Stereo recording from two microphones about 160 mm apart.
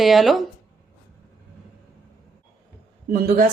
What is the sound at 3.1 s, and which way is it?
Speech, 65° right (ahead or behind).